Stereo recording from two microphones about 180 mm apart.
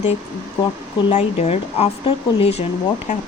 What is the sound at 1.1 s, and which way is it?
Speech, 40° left (ahead or behind).